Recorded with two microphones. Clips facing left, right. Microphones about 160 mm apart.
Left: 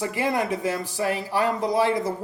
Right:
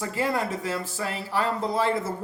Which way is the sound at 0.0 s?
15° left (ahead or behind).